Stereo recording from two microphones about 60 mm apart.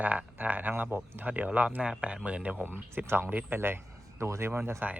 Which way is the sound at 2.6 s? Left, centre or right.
Right.